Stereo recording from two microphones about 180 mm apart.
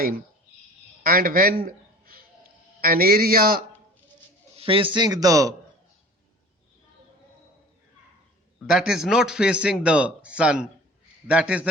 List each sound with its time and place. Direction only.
1.0 s a man's voice: 55° right (ahead or behind)
4.5 s a man's voice: 30° right (ahead or behind)
8.5 s a man's voice: 5° right (ahead or behind)